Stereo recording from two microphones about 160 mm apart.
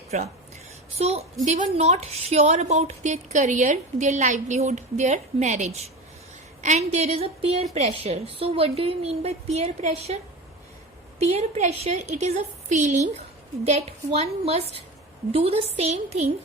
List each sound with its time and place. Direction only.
0.1 s a sound: 45° right (ahead or behind)
1.5 s a woman's voice: 45° right (ahead or behind)
11.2 s a woman's voice: 45° right (ahead or behind)